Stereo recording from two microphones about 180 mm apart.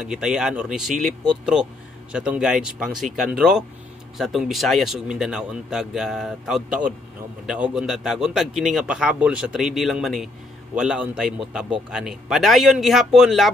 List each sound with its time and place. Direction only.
0.0 s a man's voice: 5° right (ahead or behind)